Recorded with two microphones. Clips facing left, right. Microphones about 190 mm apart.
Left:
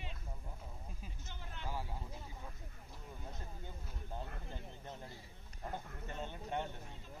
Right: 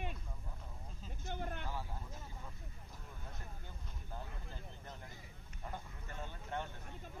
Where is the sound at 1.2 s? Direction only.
55° right (ahead or behind).